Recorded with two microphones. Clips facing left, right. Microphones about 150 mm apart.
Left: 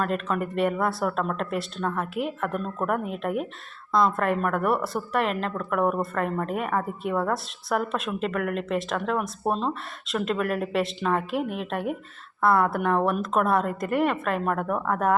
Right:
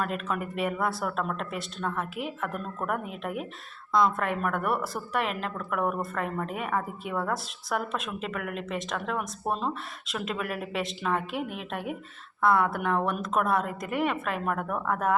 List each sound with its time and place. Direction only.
0.0 s a woman's voice: 5° right (ahead or behind)
5.8 s a woman's voice: 30° left (ahead or behind)
6.1 s a woman's voice: centre (ahead or behind)